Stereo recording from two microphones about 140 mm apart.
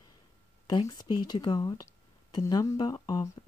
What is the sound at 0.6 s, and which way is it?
Speech, 30° left (ahead or behind).